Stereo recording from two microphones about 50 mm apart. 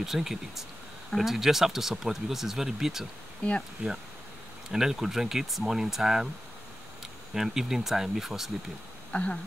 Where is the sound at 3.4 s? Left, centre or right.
Left.